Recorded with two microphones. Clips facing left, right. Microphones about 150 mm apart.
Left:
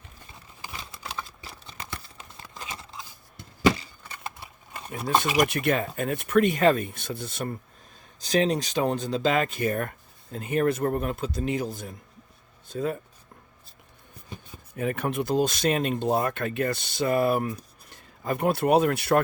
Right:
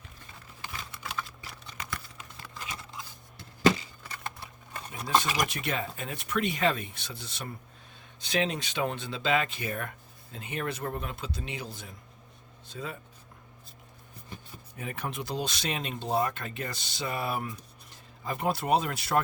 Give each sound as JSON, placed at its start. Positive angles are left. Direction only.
{"t": 0.7, "sound": "typing", "side_deg": 30}
{"t": 5.4, "sound": "speech", "side_deg": 55}
{"t": 8.2, "sound": "speech", "side_deg": 40}
{"t": 14.8, "sound": "speech", "side_deg": 60}